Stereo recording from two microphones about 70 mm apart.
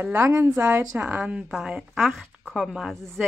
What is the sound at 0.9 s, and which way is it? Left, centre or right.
A woman's voice, centre.